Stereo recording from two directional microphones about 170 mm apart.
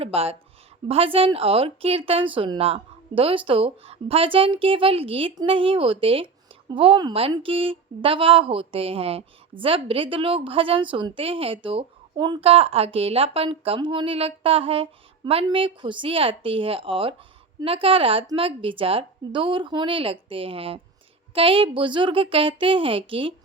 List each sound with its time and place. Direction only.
0.0 s speech: 35° right (ahead or behind)